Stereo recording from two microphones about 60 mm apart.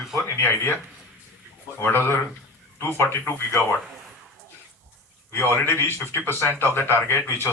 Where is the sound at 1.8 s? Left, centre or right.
Left.